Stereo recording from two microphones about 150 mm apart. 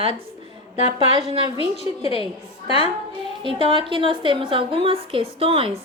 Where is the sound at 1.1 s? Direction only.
40° right (ahead or behind).